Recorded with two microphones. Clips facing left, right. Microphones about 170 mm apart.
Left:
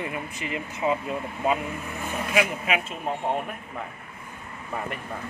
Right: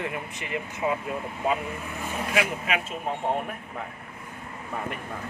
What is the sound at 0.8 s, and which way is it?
Speech, 10° left (ahead or behind).